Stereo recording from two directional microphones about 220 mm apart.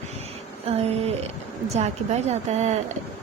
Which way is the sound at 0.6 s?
30° right (ahead or behind).